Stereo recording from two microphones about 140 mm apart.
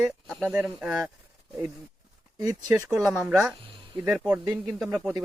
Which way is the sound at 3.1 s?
5° right (ahead or behind).